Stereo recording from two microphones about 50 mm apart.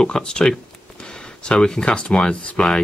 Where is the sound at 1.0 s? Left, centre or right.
Centre.